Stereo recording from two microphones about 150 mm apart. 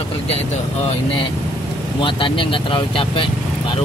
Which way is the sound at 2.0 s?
35° left (ahead or behind).